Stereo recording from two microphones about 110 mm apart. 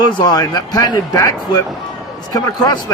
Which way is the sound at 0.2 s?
40° left (ahead or behind).